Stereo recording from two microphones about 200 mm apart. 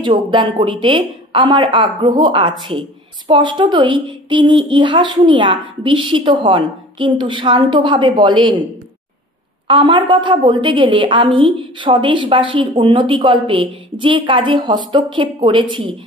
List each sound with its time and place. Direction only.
0.1 s a woman's voice: 25° right (ahead or behind)
9.7 s a woman's voice: 25° right (ahead or behind)